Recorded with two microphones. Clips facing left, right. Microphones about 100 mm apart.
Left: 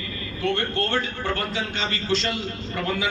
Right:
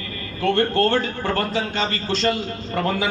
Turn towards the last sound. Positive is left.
turn(degrees=-40)  # may be behind; listen again after turning